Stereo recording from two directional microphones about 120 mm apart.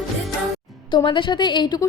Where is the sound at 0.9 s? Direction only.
40° left (ahead or behind).